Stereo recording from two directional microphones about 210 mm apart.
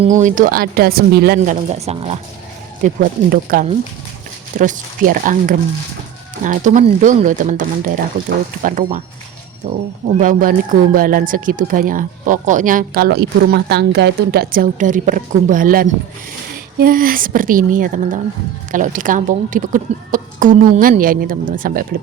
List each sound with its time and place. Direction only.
0.0 s speech: 35° right (ahead or behind)
1.6 s speech: 30° right (ahead or behind)
10.2 s speech: 40° right (ahead or behind)